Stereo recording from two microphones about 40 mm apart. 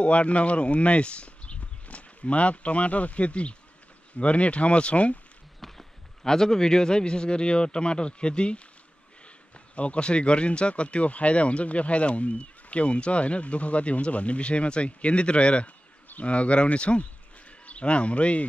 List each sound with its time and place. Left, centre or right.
0.0 s speech: left
5.6 s a man's voice: centre
9.8 s speech: left